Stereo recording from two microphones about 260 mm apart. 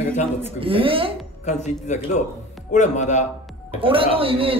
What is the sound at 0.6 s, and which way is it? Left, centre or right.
Speech, centre.